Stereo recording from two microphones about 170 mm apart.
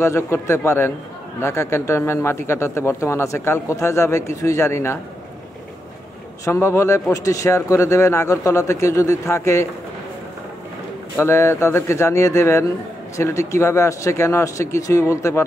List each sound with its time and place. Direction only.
0.0 s speech: 15° left (ahead or behind)
6.4 s speech: 15° left (ahead or behind)
11.1 s speech: 15° left (ahead or behind)